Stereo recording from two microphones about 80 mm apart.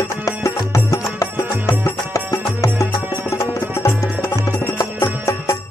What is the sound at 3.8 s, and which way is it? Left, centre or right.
Music, left.